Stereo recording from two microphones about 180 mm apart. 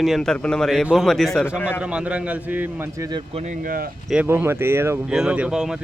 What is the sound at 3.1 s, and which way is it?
Speech, 25° right (ahead or behind).